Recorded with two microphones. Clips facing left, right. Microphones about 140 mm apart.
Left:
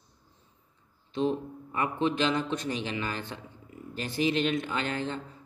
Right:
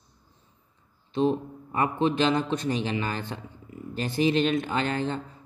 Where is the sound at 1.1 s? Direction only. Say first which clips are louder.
Right 4 dB; 35° right (ahead or behind).